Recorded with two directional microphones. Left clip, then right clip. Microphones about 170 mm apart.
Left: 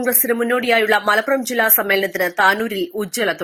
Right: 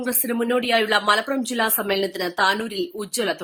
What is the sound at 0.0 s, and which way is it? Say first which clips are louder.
A woman's voice: left 6 dB; 30° left (ahead or behind).